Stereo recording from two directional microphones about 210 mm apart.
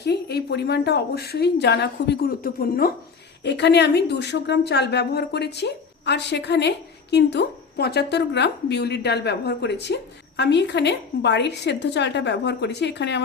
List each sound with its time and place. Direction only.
0.0 s speech: 50° left (ahead or behind)